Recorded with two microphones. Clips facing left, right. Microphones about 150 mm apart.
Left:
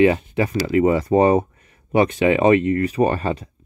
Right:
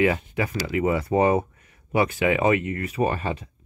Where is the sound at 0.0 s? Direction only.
30° left (ahead or behind).